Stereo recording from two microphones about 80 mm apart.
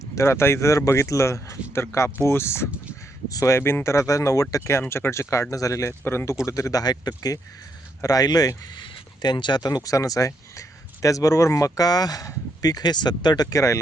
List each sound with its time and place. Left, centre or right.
0.2 s speech: left
3.2 s speech: left
6.1 s speech: left
9.2 s speech: left